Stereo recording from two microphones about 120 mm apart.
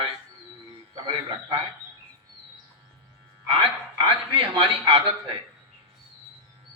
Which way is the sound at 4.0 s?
50° right (ahead or behind).